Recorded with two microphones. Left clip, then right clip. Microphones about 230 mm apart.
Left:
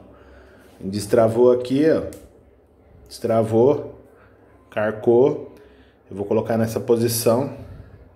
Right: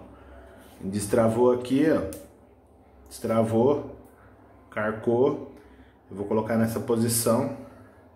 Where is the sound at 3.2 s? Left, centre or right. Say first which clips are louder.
Left 6 dB; centre.